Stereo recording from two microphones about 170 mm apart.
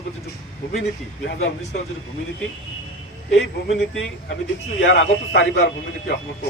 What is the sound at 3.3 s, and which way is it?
A man's voice, 90° left.